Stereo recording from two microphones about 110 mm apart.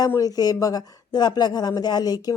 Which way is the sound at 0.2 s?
35° left (ahead or behind).